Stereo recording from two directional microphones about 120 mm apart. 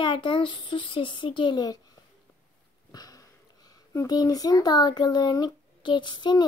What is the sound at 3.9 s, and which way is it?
Speech, 30° left (ahead or behind).